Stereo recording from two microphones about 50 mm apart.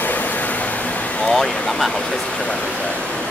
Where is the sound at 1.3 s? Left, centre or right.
Centre.